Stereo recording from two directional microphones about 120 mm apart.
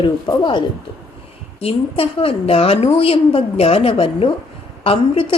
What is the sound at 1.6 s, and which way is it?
A woman's voice, 50° left (ahead or behind).